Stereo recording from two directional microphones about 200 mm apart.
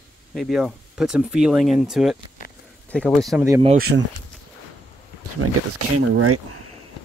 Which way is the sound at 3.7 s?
50° right (ahead or behind).